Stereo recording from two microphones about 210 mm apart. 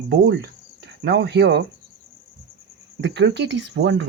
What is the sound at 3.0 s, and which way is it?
Speech, 55° right (ahead or behind).